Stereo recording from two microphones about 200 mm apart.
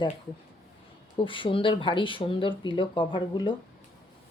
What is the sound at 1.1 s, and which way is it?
Speech, 25° left (ahead or behind).